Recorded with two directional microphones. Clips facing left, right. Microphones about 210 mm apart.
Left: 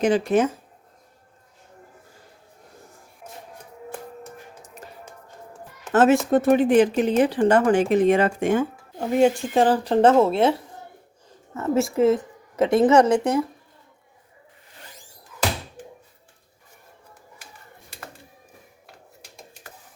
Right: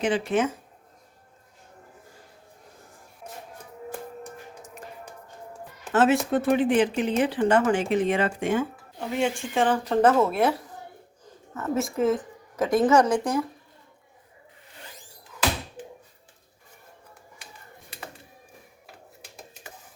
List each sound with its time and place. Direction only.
0.3 s speech: 40° left (ahead or behind)
5.9 s a woman's voice: 45° left (ahead or behind); by 13.4 s 25° left (ahead or behind)